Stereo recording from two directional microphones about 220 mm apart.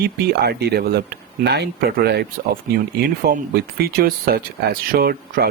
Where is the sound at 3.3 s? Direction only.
45° right (ahead or behind).